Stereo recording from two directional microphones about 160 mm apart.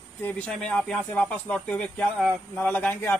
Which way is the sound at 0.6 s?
5° left (ahead or behind).